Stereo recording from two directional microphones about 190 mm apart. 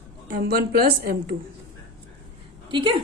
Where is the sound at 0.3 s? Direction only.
50° right (ahead or behind).